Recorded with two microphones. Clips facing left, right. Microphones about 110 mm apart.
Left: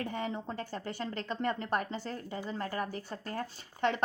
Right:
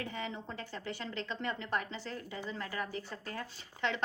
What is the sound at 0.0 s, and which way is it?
A woman's voice, 45° left (ahead or behind).